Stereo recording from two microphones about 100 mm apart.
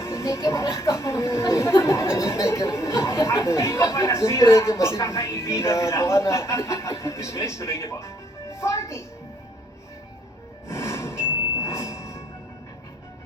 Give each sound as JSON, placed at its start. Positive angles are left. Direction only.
{"t": 0.0, "sound": "speech", "side_deg": 30}
{"t": 10.7, "sound": "music", "side_deg": 30}
{"t": 11.5, "sound": "jingle bell", "side_deg": 30}